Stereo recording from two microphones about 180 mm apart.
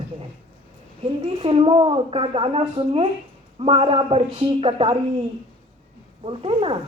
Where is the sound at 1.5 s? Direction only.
30° right (ahead or behind).